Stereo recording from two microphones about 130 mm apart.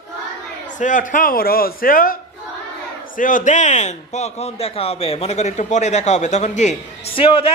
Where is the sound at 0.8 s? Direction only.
85° left.